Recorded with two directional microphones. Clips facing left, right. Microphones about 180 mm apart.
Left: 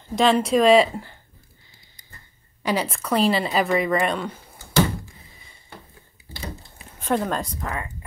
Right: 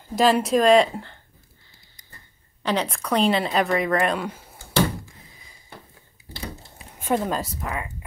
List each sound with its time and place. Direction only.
0.1 s speech: centre (ahead or behind)
2.6 s speech: 10° left (ahead or behind)
7.0 s speech: 5° right (ahead or behind)